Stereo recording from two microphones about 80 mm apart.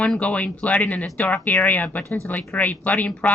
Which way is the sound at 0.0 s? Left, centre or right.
Centre.